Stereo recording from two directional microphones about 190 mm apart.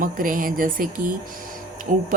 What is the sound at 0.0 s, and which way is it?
Speech, 45° right (ahead or behind).